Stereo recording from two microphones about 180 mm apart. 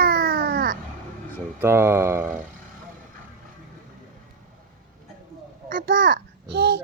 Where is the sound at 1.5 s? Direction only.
15° right (ahead or behind).